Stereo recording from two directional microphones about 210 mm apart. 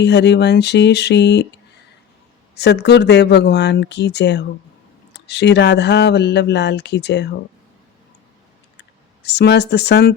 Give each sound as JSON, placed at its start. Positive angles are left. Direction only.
{"t": 0.0, "sound": "speech", "side_deg": 55}
{"t": 2.6, "sound": "speech", "side_deg": 55}
{"t": 9.2, "sound": "speech", "side_deg": 55}